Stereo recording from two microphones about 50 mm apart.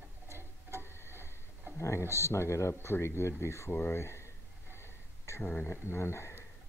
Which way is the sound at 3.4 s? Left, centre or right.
Left.